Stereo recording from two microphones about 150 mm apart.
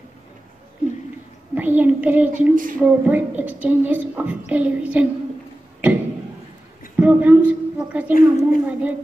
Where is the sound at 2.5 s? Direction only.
65° right (ahead or behind).